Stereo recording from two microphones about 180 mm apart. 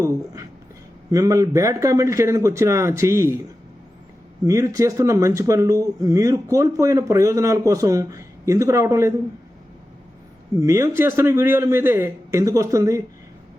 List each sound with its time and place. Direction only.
1.1 s speech: 20° right (ahead or behind)
4.4 s speech: 15° right (ahead or behind)
10.5 s speech: 15° right (ahead or behind)